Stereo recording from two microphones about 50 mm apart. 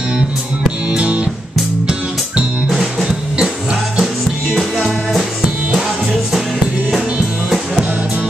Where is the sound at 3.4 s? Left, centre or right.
Centre.